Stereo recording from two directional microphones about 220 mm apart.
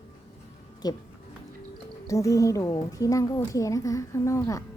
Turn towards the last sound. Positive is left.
turn(degrees=15)  # may be behind; listen again after turning